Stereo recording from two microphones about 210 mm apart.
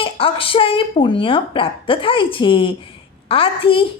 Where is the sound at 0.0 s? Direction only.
25° left (ahead or behind).